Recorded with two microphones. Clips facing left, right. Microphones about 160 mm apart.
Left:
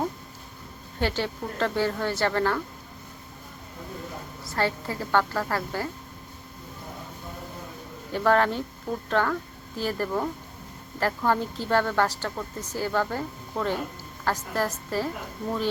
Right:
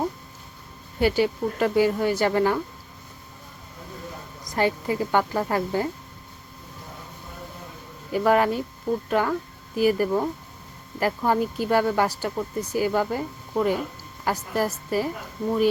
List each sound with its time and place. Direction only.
0.9 s speech: 10° right (ahead or behind)
4.4 s speech: 15° right (ahead or behind)
8.1 s speech: 10° right (ahead or behind)